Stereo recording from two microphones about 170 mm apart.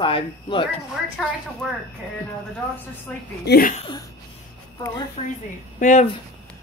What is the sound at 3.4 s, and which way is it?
Speech, 65° left (ahead or behind).